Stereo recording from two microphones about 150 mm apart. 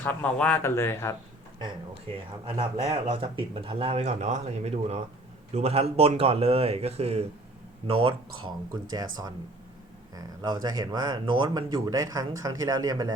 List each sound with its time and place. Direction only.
0.0 s speech: 10° left (ahead or behind)
2.5 s speech: 40° right (ahead or behind)